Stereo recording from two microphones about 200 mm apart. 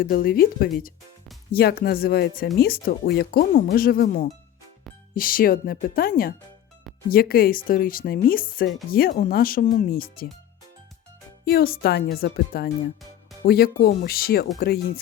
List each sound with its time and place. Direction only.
0.0 s speech: 50° left (ahead or behind)
11.4 s speech: 50° left (ahead or behind)